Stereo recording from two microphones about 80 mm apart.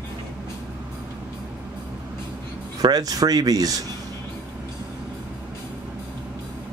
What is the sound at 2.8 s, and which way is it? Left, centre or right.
Speech, right.